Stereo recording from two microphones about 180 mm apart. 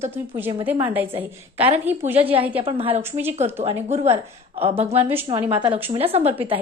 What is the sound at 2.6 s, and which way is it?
A woman's voice, 30° right (ahead or behind).